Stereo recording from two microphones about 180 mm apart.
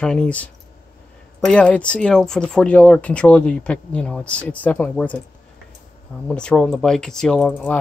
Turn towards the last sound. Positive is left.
turn(degrees=5)  # may be behind; listen again after turning